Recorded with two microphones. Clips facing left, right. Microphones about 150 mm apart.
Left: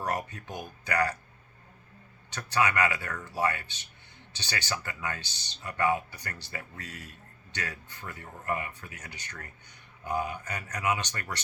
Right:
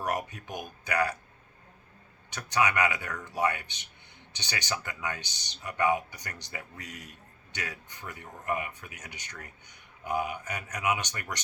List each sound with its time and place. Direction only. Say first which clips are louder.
0.0 s speech: even; 10° right (ahead or behind)
2.3 s speech: even; 15° right (ahead or behind)